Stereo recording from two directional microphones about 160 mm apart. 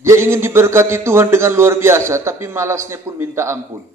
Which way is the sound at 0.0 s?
15° right (ahead or behind).